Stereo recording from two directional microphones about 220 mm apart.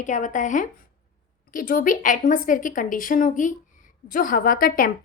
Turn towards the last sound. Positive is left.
turn(degrees=40)  # may be behind; listen again after turning